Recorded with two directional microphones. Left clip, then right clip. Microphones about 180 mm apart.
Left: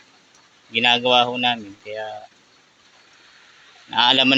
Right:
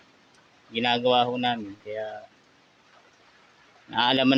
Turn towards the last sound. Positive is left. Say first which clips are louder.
# left 6 dB
turn(degrees=-15)  # may be behind; listen again after turning